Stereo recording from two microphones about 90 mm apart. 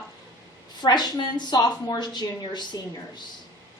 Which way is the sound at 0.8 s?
50° left (ahead or behind).